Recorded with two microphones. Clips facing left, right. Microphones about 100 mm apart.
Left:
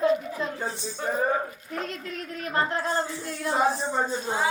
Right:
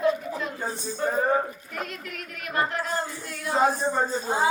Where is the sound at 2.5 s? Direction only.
30° left (ahead or behind).